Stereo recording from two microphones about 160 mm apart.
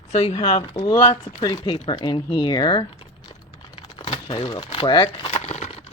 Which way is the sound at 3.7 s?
40° left (ahead or behind).